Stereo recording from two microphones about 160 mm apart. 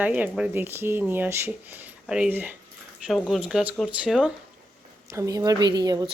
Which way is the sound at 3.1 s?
Centre (ahead or behind).